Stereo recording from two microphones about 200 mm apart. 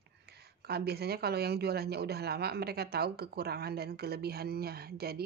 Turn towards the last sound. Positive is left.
turn(degrees=-50)  # may be behind; listen again after turning